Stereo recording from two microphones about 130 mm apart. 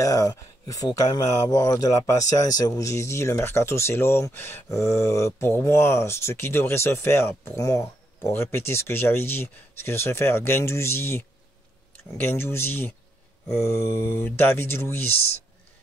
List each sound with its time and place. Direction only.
0.0 s speech: 25° left (ahead or behind)